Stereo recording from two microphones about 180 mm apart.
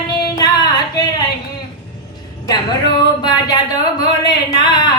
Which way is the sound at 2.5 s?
25° left (ahead or behind).